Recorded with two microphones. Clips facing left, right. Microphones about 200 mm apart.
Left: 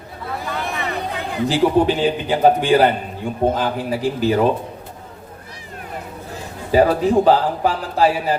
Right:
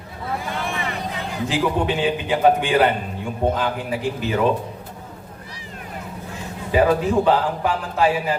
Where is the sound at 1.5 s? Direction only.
35° left (ahead or behind).